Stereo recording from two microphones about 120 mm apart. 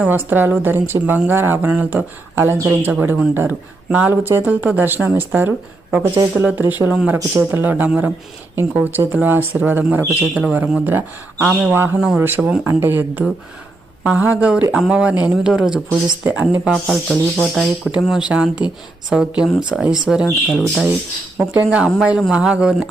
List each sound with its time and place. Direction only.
0.0 s speech: 15° right (ahead or behind)
7.2 s speech: 20° right (ahead or behind)
16.7 s speech: 5° left (ahead or behind)
21.3 s speech: 10° right (ahead or behind)